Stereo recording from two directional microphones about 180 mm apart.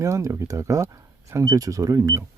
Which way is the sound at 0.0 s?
15° right (ahead or behind).